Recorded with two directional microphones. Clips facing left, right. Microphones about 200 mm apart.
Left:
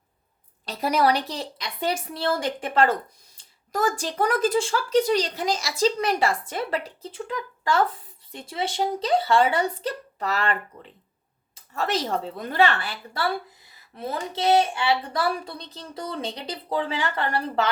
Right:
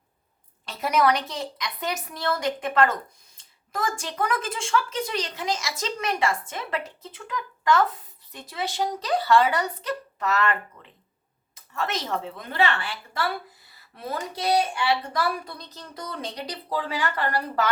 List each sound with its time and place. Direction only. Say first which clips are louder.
0.6 s a woman's voice: left 1 dB; 35° left (ahead or behind)
13.9 s a woman's voice: left 2 dB; 25° left (ahead or behind)